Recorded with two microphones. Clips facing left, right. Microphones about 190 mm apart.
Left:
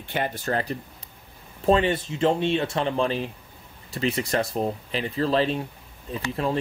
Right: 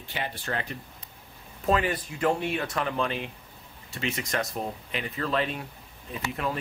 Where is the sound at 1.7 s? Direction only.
25° left (ahead or behind).